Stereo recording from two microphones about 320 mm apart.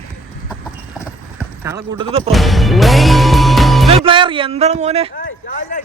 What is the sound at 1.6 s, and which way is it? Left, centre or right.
Speech, centre.